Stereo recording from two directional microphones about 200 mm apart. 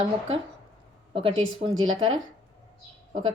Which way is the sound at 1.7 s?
80° right.